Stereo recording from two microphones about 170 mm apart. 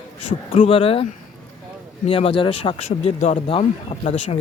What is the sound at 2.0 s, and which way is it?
Speech, 35° left (ahead or behind).